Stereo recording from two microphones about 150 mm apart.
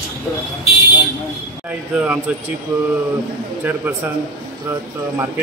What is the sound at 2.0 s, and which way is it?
Speech, 10° right (ahead or behind).